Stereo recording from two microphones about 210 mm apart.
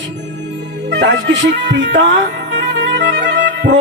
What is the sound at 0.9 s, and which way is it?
Music, 60° right (ahead or behind).